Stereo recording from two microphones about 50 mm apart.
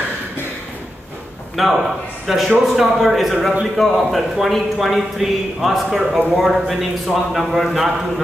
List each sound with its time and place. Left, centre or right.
1.6 s a man's voice: centre